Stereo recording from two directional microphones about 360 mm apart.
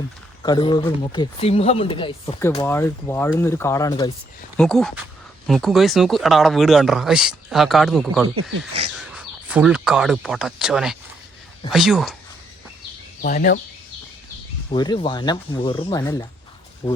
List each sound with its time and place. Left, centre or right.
0.4 s speech: centre
8.4 s speech: right
9.0 s speech: centre
13.2 s speech: left
14.7 s speech: centre